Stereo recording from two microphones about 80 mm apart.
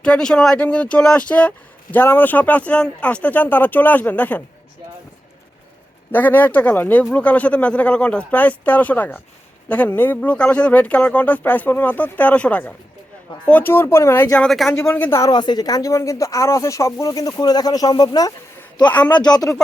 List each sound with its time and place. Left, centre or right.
0.0 s speech: centre
6.1 s speech: left
14.5 s speech: centre
15.3 s speech: left